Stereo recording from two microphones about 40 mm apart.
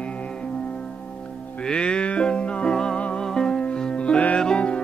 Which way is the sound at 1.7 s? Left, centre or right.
Left.